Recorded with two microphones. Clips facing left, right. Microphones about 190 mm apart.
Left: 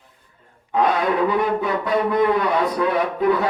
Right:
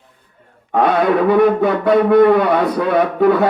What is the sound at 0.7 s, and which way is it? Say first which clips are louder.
A man's voice: right 5 dB; 60° right (ahead or behind).